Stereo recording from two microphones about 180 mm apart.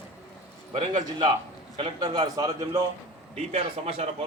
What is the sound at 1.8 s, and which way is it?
Speech, 25° right (ahead or behind).